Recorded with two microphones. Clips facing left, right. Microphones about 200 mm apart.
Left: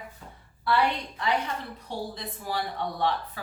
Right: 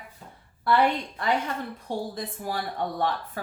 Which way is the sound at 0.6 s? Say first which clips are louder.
Right 3 dB; 50° right (ahead or behind).